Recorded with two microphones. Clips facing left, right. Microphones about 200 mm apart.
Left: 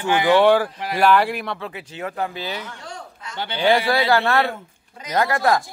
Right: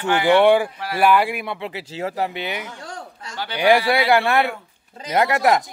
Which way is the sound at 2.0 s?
25° right (ahead or behind).